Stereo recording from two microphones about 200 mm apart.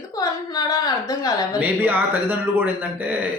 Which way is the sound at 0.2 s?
20° left (ahead or behind).